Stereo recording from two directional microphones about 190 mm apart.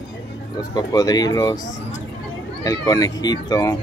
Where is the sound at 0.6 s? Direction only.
20° left (ahead or behind).